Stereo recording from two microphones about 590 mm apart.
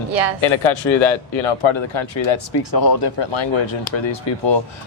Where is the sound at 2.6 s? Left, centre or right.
Left.